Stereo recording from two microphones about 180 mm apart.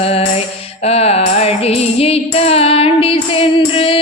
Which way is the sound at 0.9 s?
35° left (ahead or behind).